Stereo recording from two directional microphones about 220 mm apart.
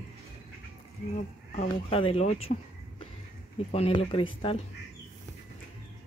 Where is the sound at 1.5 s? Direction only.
30° left (ahead or behind).